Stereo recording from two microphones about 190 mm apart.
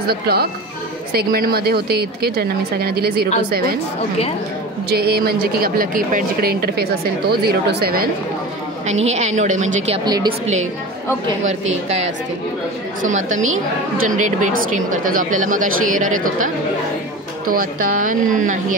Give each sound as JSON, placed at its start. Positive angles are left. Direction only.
{"t": 0.0, "sound": "a woman's voice", "side_deg": -55}
{"t": 4.8, "sound": "a woman's voice", "side_deg": -55}
{"t": 9.0, "sound": "speech", "side_deg": -35}
{"t": 10.0, "sound": "a woman's voice", "side_deg": -20}
{"t": 10.4, "sound": "speech", "side_deg": -35}
{"t": 14.0, "sound": "speech", "side_deg": -40}
{"t": 17.5, "sound": "speech", "side_deg": -50}